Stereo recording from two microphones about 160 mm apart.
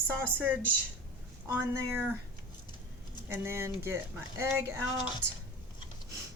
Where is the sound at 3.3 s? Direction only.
15° right (ahead or behind).